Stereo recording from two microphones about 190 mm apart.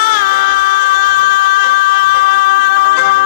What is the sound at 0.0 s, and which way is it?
Music, 50° left (ahead or behind).